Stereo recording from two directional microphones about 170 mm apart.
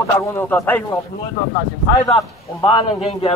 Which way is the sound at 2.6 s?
30° left (ahead or behind).